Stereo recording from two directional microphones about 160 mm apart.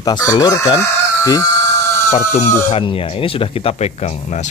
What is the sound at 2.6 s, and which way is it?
Speech, 35° left (ahead or behind).